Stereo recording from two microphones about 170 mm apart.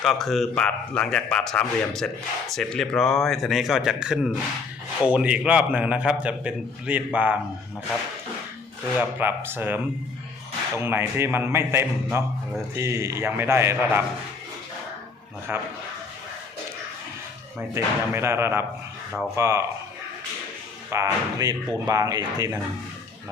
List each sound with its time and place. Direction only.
0.0 s a man's voice: centre (ahead or behind)
9.0 s a man's voice: 10° right (ahead or behind)
15.5 s a man's voice: 10° right (ahead or behind)
17.8 s a man's voice: 15° right (ahead or behind)
20.9 s speech: 20° right (ahead or behind)